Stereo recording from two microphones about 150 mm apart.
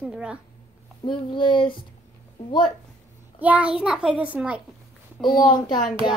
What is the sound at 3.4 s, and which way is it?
A child's voice, 10° right (ahead or behind).